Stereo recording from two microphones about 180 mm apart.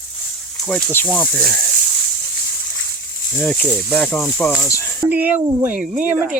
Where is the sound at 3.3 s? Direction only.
5° left (ahead or behind).